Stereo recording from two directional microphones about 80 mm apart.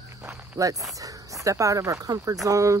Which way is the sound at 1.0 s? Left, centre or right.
Right.